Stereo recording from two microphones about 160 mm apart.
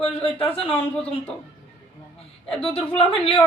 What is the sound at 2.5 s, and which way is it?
Speech, 35° left (ahead or behind).